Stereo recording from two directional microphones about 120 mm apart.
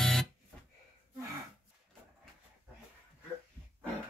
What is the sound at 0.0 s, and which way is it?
Guitar, 5° left (ahead or behind).